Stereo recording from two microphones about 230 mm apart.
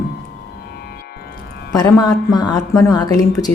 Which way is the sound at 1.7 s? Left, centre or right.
Centre.